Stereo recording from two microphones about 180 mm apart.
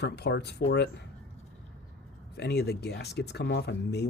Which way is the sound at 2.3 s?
65° left (ahead or behind).